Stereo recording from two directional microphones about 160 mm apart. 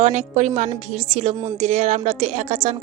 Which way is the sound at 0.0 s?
50° right (ahead or behind).